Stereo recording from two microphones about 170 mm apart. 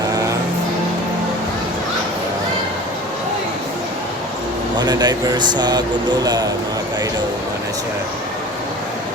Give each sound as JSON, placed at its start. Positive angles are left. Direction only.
{"t": 4.8, "sound": "speech", "side_deg": -25}